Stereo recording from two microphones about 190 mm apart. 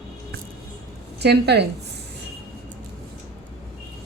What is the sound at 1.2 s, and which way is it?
Speech, 60° right (ahead or behind).